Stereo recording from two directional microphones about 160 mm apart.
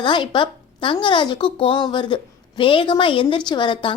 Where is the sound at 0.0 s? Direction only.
30° left (ahead or behind).